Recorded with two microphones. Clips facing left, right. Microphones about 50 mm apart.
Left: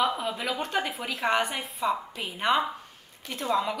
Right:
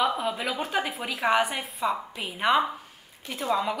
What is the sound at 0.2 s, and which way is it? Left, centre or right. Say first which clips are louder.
A woman's voice: right 1 dB; centre.